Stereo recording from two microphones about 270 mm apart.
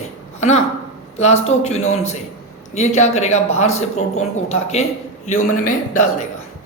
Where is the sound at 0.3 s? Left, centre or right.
Left.